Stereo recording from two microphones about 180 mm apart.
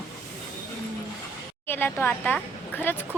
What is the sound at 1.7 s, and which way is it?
Speech, 10° left (ahead or behind).